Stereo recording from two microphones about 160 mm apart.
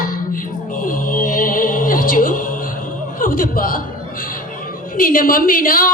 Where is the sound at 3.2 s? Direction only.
60° left (ahead or behind).